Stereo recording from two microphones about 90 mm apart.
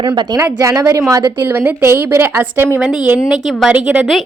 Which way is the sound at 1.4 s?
20° right (ahead or behind).